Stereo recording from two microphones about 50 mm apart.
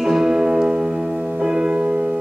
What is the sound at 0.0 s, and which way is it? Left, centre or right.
Music, centre.